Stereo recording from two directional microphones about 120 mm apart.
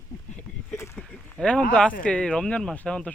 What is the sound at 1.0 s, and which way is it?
Speech, 5° left (ahead or behind).